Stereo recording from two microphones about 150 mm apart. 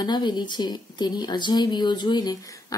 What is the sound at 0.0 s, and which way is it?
A woman's voice, 30° left (ahead or behind).